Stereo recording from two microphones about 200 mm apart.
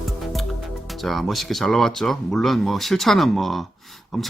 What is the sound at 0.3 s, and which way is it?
Speech, centre (ahead or behind).